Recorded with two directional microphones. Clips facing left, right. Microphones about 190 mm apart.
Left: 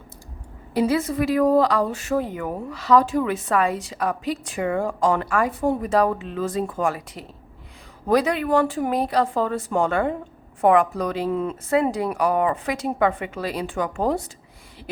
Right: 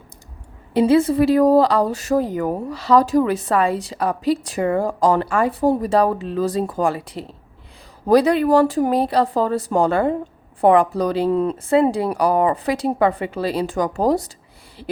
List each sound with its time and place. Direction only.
0.7 s speech: 25° right (ahead or behind)